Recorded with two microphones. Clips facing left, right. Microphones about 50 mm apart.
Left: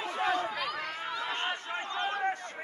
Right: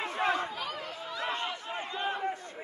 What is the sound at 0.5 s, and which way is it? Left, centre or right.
Chatter, left.